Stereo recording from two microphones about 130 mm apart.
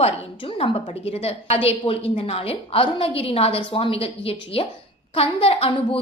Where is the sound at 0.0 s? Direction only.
45° left (ahead or behind).